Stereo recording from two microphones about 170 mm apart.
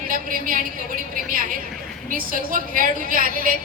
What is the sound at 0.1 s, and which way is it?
A woman's voice, 55° right (ahead or behind).